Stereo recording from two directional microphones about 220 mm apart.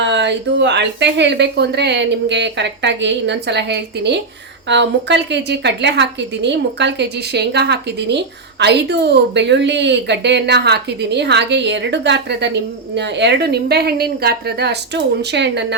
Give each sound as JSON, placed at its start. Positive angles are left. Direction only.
{"t": 0.0, "sound": "a woman's voice", "side_deg": -55}